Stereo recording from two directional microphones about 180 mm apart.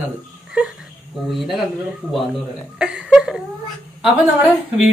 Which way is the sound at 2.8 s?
5° right (ahead or behind).